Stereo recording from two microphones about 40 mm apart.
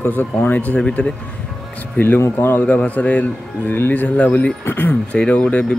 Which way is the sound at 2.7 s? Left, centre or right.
Left.